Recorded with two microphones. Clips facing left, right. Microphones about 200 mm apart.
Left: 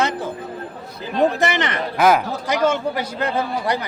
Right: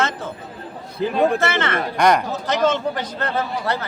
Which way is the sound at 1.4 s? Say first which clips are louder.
Even; 15° left (ahead or behind).